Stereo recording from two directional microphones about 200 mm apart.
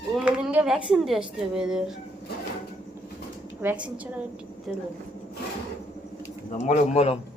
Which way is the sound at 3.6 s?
5° right (ahead or behind).